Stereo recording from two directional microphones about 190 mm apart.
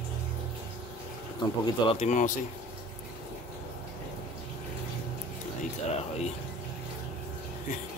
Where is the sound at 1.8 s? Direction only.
35° left (ahead or behind).